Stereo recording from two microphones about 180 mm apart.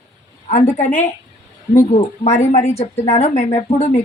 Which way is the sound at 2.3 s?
35° left (ahead or behind).